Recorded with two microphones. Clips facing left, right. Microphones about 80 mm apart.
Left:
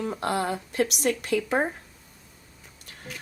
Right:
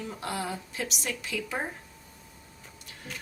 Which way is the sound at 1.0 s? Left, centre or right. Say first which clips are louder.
Left 9 dB; left.